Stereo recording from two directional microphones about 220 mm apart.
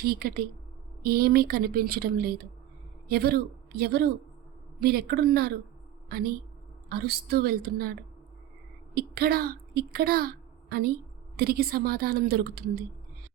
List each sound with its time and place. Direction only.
0.0 s a woman's voice: 45° right (ahead or behind)
6.8 s a woman's voice: 45° right (ahead or behind)
9.0 s a woman's voice: 45° right (ahead or behind)